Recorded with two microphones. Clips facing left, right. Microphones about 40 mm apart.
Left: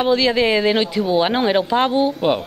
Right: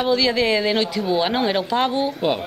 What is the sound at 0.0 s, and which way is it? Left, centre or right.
Speech, centre.